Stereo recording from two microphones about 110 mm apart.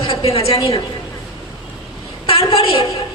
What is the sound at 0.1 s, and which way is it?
Speech, 60° left (ahead or behind).